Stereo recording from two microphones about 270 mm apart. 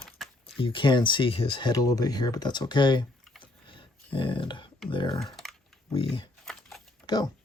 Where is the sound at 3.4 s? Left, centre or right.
Centre.